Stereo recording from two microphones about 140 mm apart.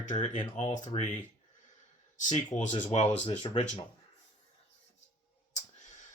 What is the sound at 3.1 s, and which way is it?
Speech, 45° left (ahead or behind).